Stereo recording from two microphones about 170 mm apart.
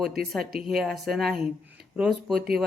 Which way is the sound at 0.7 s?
Centre (ahead or behind).